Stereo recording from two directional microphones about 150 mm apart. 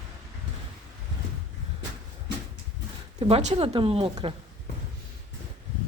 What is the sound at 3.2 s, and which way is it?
A woman's voice, 45° right (ahead or behind).